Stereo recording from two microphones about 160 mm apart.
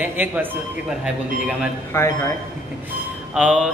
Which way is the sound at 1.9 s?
15° left (ahead or behind).